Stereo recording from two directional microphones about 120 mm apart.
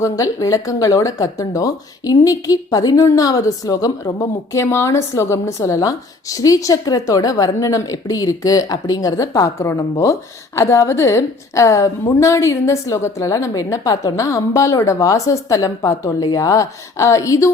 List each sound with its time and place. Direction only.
0.0 s speech: 30° left (ahead or behind)